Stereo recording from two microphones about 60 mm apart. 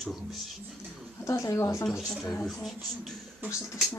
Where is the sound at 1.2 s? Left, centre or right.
Left.